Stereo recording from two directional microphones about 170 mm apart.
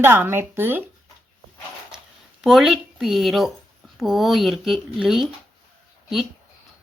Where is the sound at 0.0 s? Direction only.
15° right (ahead or behind).